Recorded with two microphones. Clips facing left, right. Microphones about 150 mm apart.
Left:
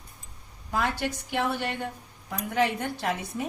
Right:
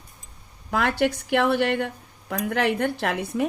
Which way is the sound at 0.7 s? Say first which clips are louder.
Right 6 dB; 65° right (ahead or behind).